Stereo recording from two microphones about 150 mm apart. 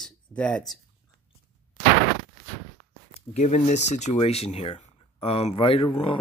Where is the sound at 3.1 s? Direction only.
45° left (ahead or behind).